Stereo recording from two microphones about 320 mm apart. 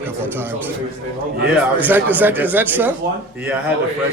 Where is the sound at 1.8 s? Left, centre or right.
Centre.